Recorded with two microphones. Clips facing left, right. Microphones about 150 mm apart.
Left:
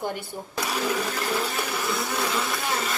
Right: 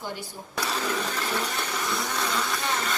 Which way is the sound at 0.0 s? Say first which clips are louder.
Left 5 dB; 55° left (ahead or behind).